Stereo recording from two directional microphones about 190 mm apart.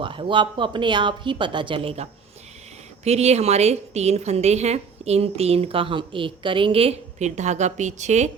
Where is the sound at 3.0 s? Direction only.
35° right (ahead or behind).